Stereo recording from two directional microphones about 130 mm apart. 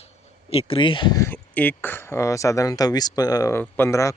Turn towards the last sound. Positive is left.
turn(degrees=25)  # may be behind; listen again after turning